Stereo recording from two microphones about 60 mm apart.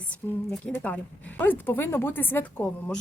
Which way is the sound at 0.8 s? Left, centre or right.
Left.